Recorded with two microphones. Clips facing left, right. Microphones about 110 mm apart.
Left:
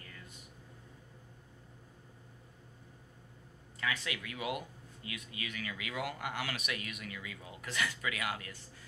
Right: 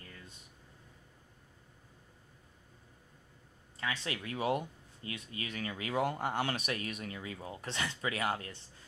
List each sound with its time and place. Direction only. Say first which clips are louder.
3.8 s speech: even; 30° right (ahead or behind)